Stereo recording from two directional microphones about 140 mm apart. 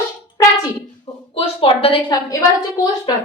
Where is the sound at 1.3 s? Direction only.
40° left (ahead or behind).